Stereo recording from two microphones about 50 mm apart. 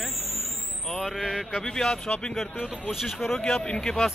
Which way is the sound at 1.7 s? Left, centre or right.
Centre.